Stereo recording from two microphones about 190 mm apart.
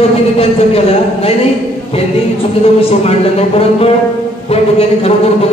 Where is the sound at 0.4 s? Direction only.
30° left (ahead or behind).